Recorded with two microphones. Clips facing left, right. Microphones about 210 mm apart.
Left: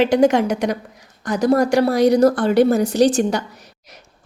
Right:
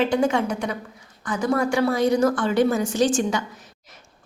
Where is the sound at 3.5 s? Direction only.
70° left (ahead or behind).